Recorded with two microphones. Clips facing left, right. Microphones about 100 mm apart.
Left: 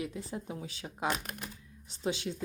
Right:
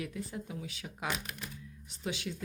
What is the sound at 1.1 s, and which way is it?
Speech, 45° left (ahead or behind).